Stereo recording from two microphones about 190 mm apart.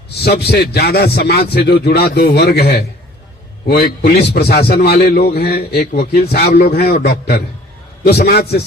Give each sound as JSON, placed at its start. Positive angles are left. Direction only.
{"t": 0.4, "sound": "a man's voice", "side_deg": 55}